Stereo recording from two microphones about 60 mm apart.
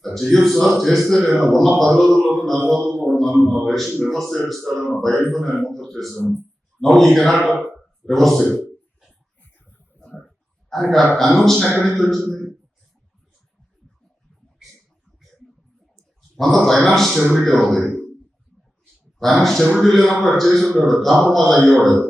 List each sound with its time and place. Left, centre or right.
0.0 s a man's voice: centre
3.0 s music: centre
3.6 s a man's voice: centre
9.4 s a sound: left
10.2 s a sound: centre
11.1 s a man's voice: centre
16.4 s a man's voice: centre
19.2 s a man's voice: centre